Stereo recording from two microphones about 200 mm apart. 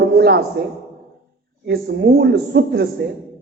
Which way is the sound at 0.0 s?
50° right (ahead or behind).